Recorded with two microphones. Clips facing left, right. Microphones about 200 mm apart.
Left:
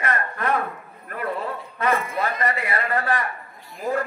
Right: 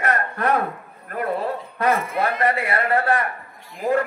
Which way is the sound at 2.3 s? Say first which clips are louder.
Right 4 dB; 55° right (ahead or behind).